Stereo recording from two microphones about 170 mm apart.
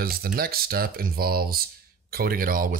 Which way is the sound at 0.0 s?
60° right (ahead or behind).